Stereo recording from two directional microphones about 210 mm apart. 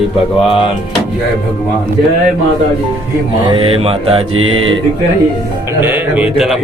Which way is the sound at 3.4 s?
25° right (ahead or behind).